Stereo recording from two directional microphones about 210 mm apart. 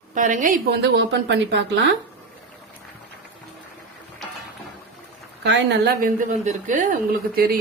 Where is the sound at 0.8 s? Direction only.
55° right (ahead or behind).